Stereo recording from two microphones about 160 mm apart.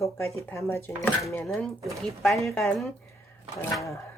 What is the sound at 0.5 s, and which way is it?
Speech, 15° left (ahead or behind).